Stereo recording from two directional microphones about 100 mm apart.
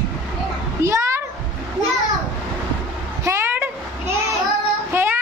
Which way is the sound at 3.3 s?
25° right (ahead or behind).